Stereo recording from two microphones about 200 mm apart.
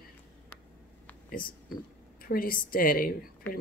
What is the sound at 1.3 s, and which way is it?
Speech, 45° left (ahead or behind).